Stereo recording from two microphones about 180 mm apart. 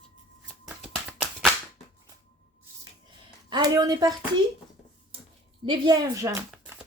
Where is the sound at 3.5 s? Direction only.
20° right (ahead or behind).